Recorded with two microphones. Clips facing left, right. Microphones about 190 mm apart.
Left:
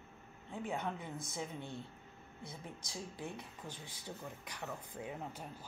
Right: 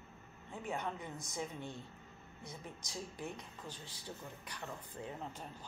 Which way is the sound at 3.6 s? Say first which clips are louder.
Left 1 dB; 15° left (ahead or behind).